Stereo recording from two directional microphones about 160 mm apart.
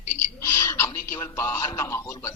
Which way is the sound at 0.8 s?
15° left (ahead or behind).